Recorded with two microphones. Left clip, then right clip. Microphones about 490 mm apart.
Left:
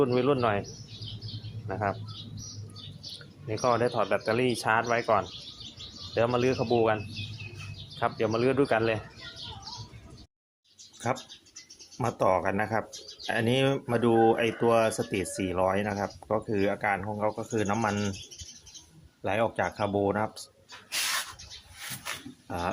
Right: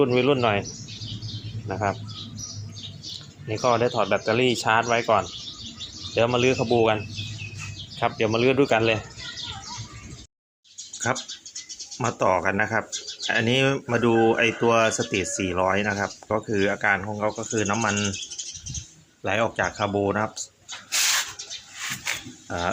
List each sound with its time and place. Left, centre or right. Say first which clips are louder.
0.0 s speech: right 5 dB; left
1.6 s speech: right 4 dB; left
3.5 s speech: right 4 dB; left
11.1 s speech: right 4 dB; left
19.2 s speech: right 4 dB; left
22.4 s speech: right 5 dB; left